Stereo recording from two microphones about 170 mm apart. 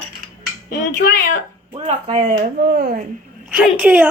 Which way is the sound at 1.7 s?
35° right (ahead or behind).